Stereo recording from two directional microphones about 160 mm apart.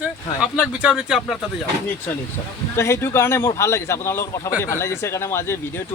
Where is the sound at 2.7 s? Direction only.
15° left (ahead or behind).